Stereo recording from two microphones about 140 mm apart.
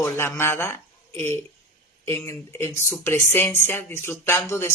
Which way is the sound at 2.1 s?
20° left (ahead or behind).